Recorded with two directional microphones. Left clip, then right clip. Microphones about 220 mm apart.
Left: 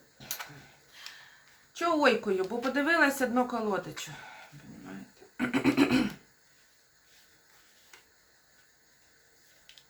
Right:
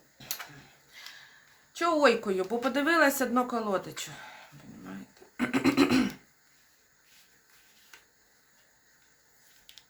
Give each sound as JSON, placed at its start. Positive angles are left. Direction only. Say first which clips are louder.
{"t": 0.2, "sound": "tick-tock", "louder": "right 1 dB", "side_deg": -25}
{"t": 1.7, "sound": "a woman's voice", "louder": "right 2 dB", "side_deg": -25}
{"t": 5.4, "sound": "a sound", "louder": "right 1 dB", "side_deg": -35}